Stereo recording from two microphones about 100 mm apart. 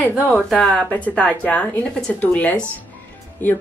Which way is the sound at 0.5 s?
10° left (ahead or behind).